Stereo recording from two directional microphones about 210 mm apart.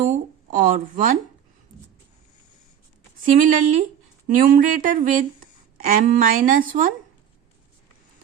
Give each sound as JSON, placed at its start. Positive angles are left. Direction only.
{"t": 0.0, "sound": "speech", "side_deg": -35}
{"t": 3.2, "sound": "a woman's voice", "side_deg": -40}